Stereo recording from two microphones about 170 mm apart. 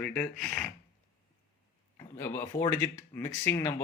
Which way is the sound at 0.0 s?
5° left (ahead or behind).